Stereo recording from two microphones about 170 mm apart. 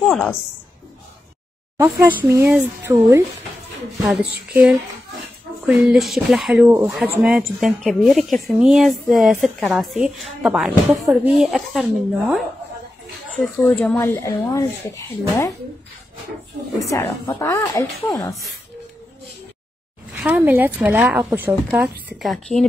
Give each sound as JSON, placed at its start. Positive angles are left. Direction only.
{"t": 0.0, "sound": "a woman's voice", "side_deg": 0}
{"t": 1.8, "sound": "speech", "side_deg": -15}
{"t": 6.6, "sound": "speech", "side_deg": -10}
{"t": 13.4, "sound": "speech", "side_deg": 10}
{"t": 16.8, "sound": "speech", "side_deg": 15}
{"t": 20.1, "sound": "speech", "side_deg": -10}
{"t": 22.2, "sound": "speech", "side_deg": 0}